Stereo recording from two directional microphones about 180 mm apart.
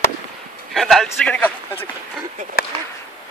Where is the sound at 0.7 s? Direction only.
Centre (ahead or behind).